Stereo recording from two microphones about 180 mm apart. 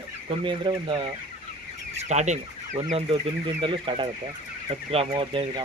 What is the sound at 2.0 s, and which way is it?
Chicken, 40° right (ahead or behind).